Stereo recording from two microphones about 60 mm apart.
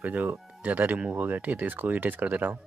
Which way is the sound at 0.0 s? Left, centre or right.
Right.